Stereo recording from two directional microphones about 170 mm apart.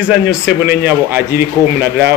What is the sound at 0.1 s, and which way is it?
A man's voice, 10° right (ahead or behind).